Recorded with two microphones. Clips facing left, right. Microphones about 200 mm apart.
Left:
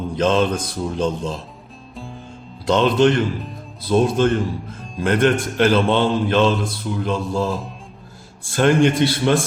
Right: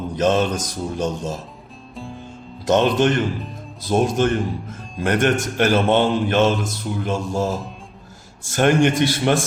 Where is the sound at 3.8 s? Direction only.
50° right (ahead or behind).